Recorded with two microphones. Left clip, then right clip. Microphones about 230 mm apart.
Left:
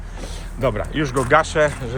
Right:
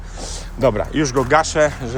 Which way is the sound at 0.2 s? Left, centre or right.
Centre.